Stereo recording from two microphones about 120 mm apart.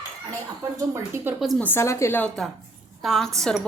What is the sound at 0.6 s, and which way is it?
Speech, 25° right (ahead or behind).